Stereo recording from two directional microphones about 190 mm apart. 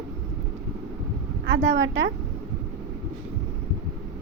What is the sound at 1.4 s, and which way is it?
Speech, 75° right (ahead or behind).